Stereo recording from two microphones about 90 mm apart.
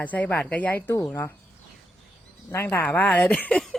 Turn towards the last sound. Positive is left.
turn(degrees=10)  # may be behind; listen again after turning